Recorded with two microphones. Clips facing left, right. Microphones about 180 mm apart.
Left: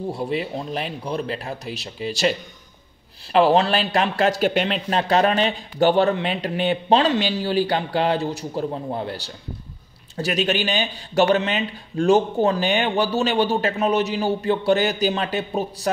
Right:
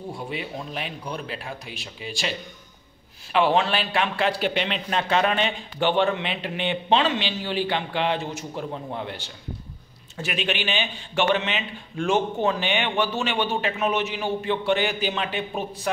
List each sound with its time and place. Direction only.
0.1 s speech: 35° left (ahead or behind)
3.3 s speech: 35° left (ahead or behind)